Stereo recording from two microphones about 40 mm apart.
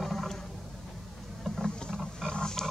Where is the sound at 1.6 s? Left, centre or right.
Left.